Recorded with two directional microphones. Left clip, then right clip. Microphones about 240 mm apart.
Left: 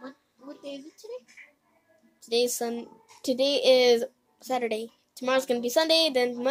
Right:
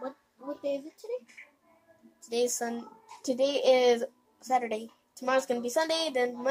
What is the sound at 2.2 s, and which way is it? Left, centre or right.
A woman's voice, centre.